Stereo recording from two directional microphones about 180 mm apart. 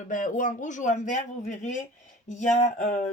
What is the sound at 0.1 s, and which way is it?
Speech, 45° left (ahead or behind).